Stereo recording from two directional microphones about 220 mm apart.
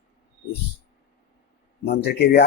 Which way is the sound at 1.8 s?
45° left (ahead or behind).